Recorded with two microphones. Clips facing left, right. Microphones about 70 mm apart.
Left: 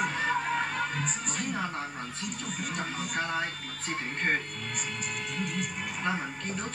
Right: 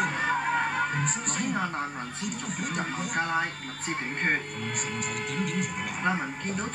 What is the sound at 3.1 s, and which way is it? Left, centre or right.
Speech, right.